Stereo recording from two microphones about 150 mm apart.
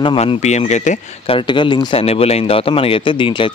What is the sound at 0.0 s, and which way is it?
Speech, 35° left (ahead or behind).